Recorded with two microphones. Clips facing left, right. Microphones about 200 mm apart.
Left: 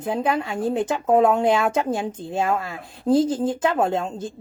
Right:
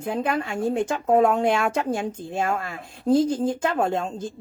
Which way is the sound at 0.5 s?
25° left (ahead or behind).